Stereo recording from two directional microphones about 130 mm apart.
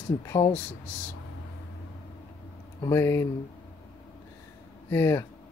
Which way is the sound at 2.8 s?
20° left (ahead or behind).